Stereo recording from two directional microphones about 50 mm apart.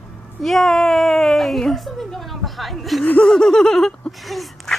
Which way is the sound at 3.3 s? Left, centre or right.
Centre.